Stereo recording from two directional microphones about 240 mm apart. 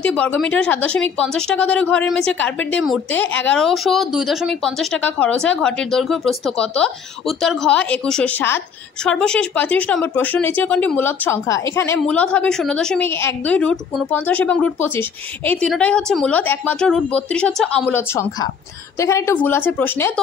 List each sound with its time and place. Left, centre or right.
0.0 s a woman's voice: centre